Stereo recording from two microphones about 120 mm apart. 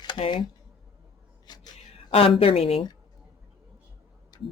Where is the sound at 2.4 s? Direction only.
55° left (ahead or behind).